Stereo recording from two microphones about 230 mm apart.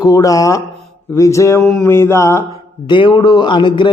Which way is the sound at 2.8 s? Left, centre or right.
Left.